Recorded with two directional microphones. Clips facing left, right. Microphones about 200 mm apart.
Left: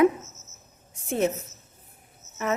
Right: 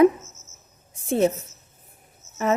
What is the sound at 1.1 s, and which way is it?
Speech, 30° right (ahead or behind).